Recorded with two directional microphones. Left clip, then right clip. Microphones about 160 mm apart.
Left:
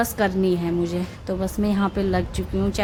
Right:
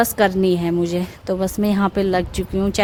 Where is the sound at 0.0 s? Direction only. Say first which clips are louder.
Right 5 dB; 50° right (ahead or behind).